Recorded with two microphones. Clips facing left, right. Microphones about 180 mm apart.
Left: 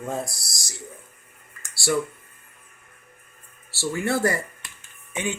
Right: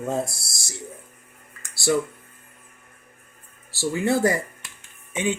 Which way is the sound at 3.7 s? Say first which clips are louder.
Right 3 dB; 20° right (ahead or behind).